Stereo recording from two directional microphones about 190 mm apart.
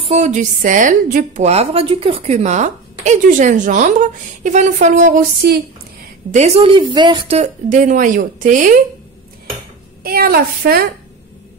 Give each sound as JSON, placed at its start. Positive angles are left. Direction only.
{"t": 0.0, "sound": "a woman's voice", "side_deg": -35}
{"t": 6.3, "sound": "speech", "side_deg": -30}
{"t": 7.3, "sound": "speech", "side_deg": -40}
{"t": 10.0, "sound": "speech", "side_deg": -50}